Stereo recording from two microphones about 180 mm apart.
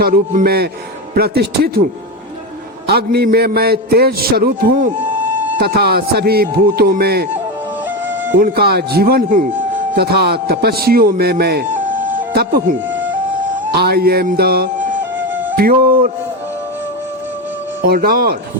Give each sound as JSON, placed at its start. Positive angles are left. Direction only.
{"t": 0.0, "sound": "a man's voice", "side_deg": -55}
{"t": 2.8, "sound": "a man's voice", "side_deg": -60}
{"t": 5.1, "sound": "music", "side_deg": -10}
{"t": 5.5, "sound": "a man's voice", "side_deg": -60}
{"t": 8.4, "sound": "a man's voice", "side_deg": -55}
{"t": 11.9, "sound": "music", "side_deg": -50}
{"t": 13.7, "sound": "a man's voice", "side_deg": -60}
{"t": 17.8, "sound": "a man's voice", "side_deg": -55}